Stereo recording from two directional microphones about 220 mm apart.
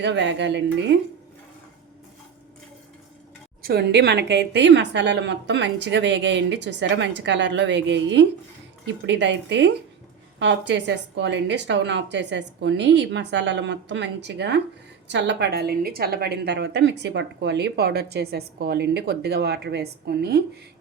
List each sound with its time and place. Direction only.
0.0 s a woman's voice: 55° right (ahead or behind)
3.6 s a woman's voice: 45° right (ahead or behind)